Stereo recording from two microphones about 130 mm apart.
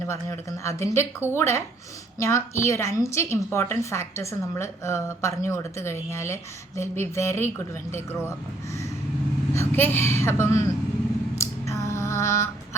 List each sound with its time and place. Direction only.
0.1 s a woman's voice: 25° left (ahead or behind)
9.6 s a woman's voice: 15° left (ahead or behind)
11.3 s a sound: 20° left (ahead or behind)